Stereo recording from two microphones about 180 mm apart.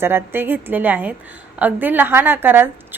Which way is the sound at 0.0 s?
10° right (ahead or behind).